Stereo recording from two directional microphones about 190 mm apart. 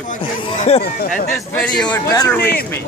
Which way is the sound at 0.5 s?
35° left (ahead or behind).